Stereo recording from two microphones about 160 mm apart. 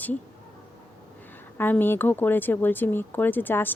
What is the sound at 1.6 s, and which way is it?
Speech, 10° left (ahead or behind).